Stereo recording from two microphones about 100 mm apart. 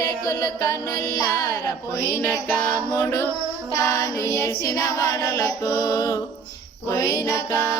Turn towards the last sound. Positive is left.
turn(degrees=35)  # may be behind; listen again after turning